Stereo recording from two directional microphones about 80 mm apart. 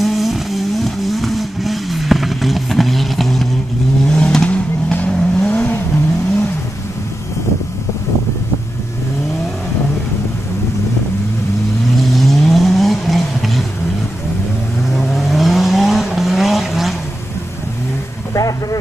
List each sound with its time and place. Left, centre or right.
0.0 s vehicle: centre
12.1 s vehicle: centre
15.0 s vehicle: centre
18.3 s vehicle: left